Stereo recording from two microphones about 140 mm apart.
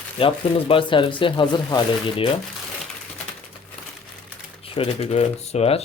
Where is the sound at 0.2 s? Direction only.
40° left (ahead or behind).